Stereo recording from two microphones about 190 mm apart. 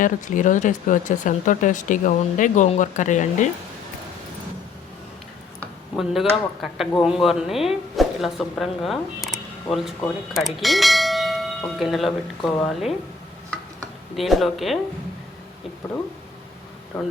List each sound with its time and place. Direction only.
0.0 s speech: 40° left (ahead or behind)
5.5 s a sound: centre (ahead or behind)
6.6 s speech: centre (ahead or behind)
14.2 s speech: centre (ahead or behind)